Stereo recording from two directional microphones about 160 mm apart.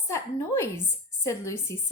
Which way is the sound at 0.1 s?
15° left (ahead or behind).